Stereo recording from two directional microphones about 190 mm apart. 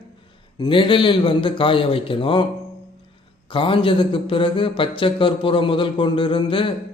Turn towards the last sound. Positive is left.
turn(degrees=25)  # may be behind; listen again after turning